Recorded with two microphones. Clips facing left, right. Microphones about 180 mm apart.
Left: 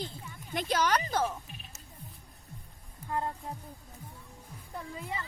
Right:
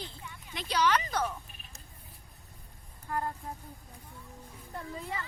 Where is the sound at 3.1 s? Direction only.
20° left (ahead or behind).